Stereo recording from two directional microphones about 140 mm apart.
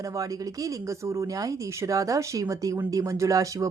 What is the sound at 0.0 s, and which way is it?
Speech, 25° right (ahead or behind).